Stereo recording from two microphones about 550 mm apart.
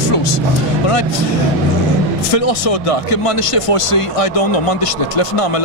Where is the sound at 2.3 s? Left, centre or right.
Left.